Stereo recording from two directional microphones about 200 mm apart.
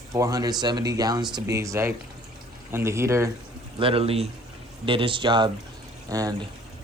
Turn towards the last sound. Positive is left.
turn(degrees=-15)  # may be behind; listen again after turning